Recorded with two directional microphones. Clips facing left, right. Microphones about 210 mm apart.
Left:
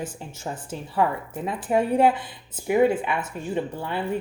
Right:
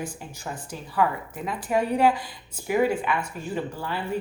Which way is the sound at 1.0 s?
25° left (ahead or behind).